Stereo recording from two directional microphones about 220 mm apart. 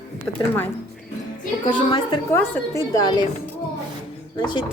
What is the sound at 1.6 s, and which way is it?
A woman's voice, 25° left (ahead or behind).